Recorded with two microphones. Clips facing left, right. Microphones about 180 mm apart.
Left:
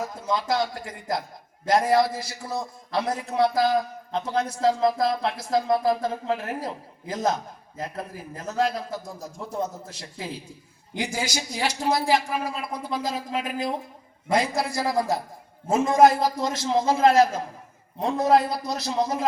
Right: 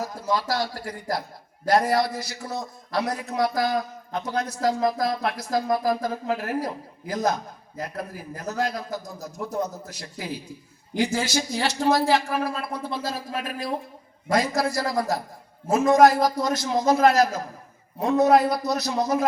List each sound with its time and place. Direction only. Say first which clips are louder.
0.1 s speech: even; 20° left (ahead or behind)
10.9 s speech: right 5 dB; 15° left (ahead or behind)